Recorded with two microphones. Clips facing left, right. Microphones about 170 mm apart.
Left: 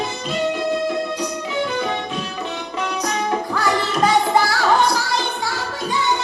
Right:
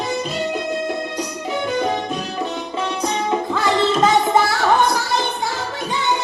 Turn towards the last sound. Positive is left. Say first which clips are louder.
# right 1 dB
turn(degrees=-20)  # may be behind; listen again after turning